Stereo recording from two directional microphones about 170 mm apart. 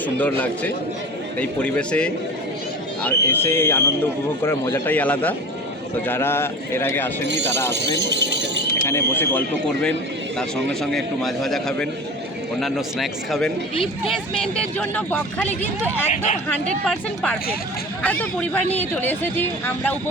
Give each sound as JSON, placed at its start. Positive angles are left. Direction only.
{"t": 0.2, "sound": "speech", "side_deg": 10}
{"t": 7.9, "sound": "a sound", "side_deg": -90}
{"t": 8.9, "sound": "speech", "side_deg": 15}
{"t": 10.9, "sound": "speech", "side_deg": 0}